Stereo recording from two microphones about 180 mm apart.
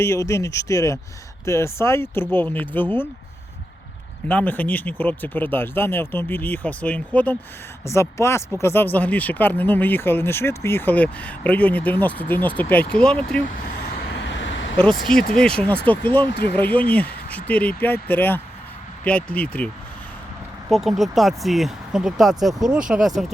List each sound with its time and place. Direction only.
0.0 s speech: 15° left (ahead or behind)
4.3 s speech: 10° left (ahead or behind)
14.1 s vehicle: 90° left
15.4 s speech: 5° left (ahead or behind)
16.3 s speech: 70° left (ahead or behind)
16.6 s speech: 10° left (ahead or behind)